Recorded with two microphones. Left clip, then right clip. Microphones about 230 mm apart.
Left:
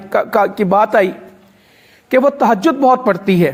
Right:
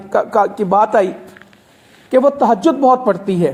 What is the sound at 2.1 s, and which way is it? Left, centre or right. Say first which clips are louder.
Speech: even; left.